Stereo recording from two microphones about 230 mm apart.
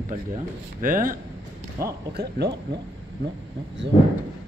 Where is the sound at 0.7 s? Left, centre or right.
Right.